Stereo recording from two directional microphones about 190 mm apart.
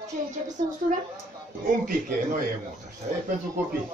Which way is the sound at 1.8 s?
45° right (ahead or behind).